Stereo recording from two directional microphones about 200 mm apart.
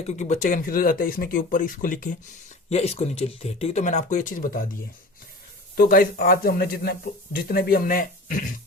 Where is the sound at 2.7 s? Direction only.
30° left (ahead or behind).